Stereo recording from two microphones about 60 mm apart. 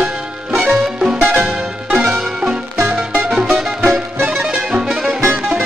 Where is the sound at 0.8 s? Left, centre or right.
Centre.